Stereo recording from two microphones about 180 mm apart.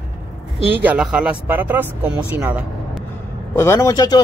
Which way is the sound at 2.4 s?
10° right (ahead or behind).